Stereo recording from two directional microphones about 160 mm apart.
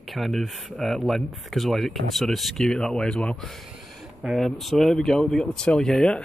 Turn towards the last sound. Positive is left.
turn(degrees=5)  # may be behind; listen again after turning